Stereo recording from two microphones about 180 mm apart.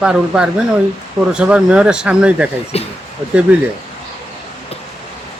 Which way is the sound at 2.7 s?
35° left (ahead or behind).